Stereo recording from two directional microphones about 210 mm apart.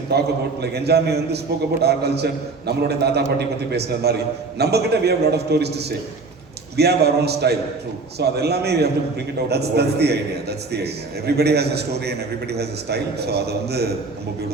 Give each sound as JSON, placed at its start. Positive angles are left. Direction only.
{"t": 0.1, "sound": "a man's voice", "side_deg": -50}